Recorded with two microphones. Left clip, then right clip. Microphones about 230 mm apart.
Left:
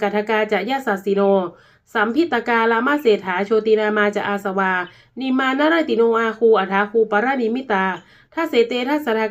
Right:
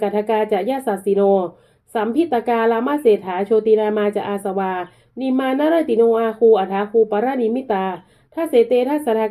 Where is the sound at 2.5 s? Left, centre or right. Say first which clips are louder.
Left 1 dB; left.